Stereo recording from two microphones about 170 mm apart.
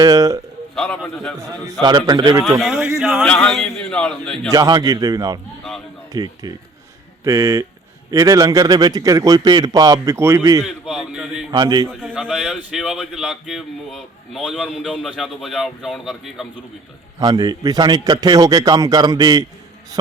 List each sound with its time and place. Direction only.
0.0 s a man's voice: 20° right (ahead or behind)
1.1 s speech: 5° left (ahead or behind)
1.4 s a man's voice: 20° right (ahead or behind)
2.6 s speech: centre (ahead or behind)
4.5 s a man's voice: 20° right (ahead or behind)
10.7 s a sound: centre (ahead or behind)
11.5 s a man's voice: 25° right (ahead or behind)
11.9 s speech: 5° right (ahead or behind)
17.2 s a man's voice: 20° right (ahead or behind)